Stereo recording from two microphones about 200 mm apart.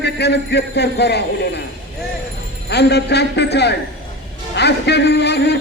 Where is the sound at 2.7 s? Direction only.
55° left (ahead or behind).